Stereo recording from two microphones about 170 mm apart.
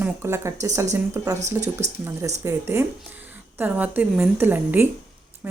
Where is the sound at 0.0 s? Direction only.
15° right (ahead or behind).